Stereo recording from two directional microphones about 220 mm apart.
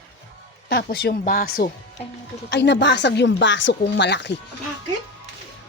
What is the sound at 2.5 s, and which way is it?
Speech, 50° left (ahead or behind).